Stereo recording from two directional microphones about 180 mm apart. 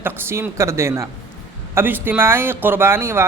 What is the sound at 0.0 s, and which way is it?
Speech, 10° right (ahead or behind).